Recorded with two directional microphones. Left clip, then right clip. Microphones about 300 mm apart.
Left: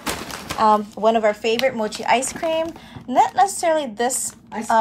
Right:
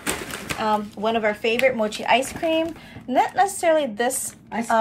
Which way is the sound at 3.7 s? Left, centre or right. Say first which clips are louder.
Right 1 dB; left.